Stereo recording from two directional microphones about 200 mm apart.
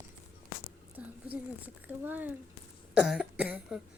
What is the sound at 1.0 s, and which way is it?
Cough, 5° right (ahead or behind).